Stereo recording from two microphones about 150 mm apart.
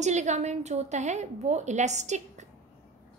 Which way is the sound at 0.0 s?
50° right (ahead or behind).